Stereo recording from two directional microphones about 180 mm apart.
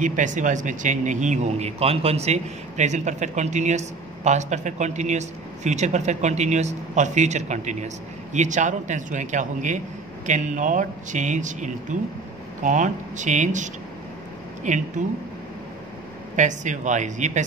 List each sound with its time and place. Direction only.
0.0 s speech: 45° right (ahead or behind)
16.3 s speech: 45° right (ahead or behind)